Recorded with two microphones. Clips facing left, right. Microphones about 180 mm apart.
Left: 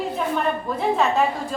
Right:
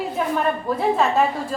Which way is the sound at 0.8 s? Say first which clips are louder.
Right 1 dB; centre (ahead or behind).